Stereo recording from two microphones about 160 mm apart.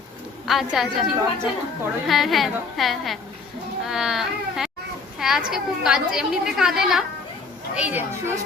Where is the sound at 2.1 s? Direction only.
Centre (ahead or behind).